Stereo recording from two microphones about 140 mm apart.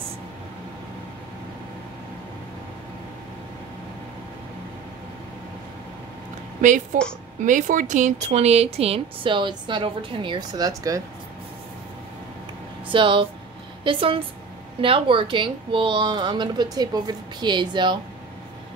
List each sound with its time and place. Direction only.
6.6 s a woman's voice: 60° right (ahead or behind); by 11.0 s 25° right (ahead or behind)
12.9 s a woman's voice: 35° right (ahead or behind)